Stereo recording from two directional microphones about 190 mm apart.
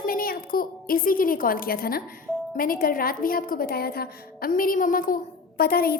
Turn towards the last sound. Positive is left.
turn(degrees=50)  # may be behind; listen again after turning